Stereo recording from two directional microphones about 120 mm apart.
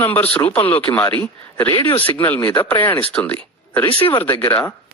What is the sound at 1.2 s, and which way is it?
Speech, 15° left (ahead or behind).